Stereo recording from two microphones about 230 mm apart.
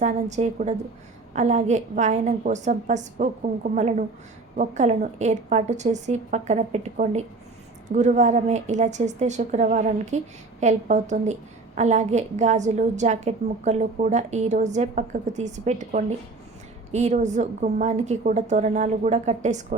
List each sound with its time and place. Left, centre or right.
0.0 s a woman's voice: right